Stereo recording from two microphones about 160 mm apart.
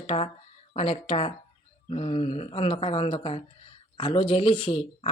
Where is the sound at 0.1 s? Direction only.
35° left (ahead or behind).